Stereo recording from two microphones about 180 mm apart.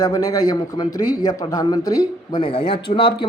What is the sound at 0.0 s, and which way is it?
A man's voice, 20° left (ahead or behind).